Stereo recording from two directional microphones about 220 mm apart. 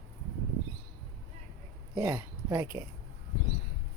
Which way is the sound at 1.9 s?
10° right (ahead or behind).